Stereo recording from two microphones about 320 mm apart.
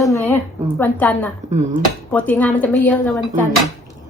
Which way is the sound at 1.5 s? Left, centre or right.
Right.